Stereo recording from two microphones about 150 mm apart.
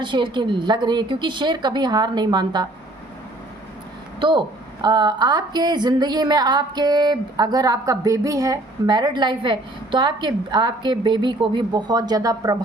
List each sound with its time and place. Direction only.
0.0 s a woman's voice: 30° right (ahead or behind)
4.2 s a woman's voice: 30° right (ahead or behind)